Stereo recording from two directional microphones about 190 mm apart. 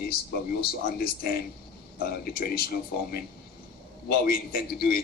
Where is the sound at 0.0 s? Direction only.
55° left (ahead or behind).